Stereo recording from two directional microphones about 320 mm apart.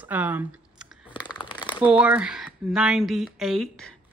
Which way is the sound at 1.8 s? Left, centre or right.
Centre.